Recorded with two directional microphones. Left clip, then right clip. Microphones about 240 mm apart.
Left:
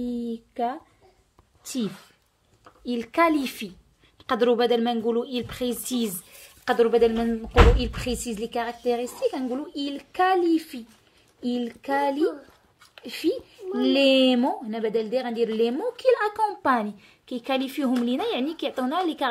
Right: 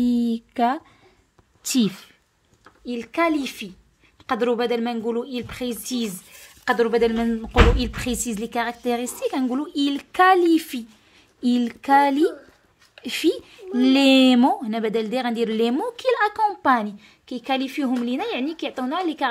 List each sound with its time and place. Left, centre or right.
0.0 s a sound: right
2.8 s speech: centre; by 12.0 s right
13.0 s speech: right; by 19.2 s centre